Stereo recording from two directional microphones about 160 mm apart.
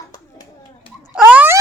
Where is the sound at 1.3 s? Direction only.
15° right (ahead or behind).